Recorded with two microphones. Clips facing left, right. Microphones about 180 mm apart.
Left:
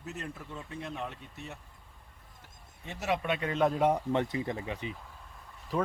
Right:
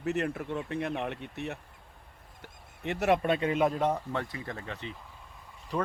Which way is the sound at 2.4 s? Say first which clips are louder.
Right 11 dB; 65° right (ahead or behind).